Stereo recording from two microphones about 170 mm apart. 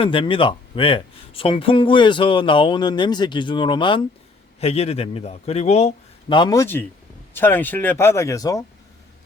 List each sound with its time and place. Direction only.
0.0 s a man's voice: 30° left (ahead or behind)